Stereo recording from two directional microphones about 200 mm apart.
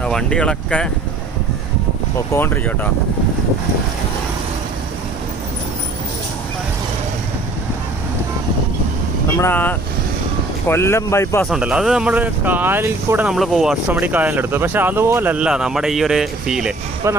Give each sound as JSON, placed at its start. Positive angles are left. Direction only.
{"t": 0.0, "sound": "speech", "side_deg": 5}
{"t": 2.1, "sound": "speech", "side_deg": 10}
{"t": 9.4, "sound": "speech", "side_deg": 10}
{"t": 11.4, "sound": "speech", "side_deg": -5}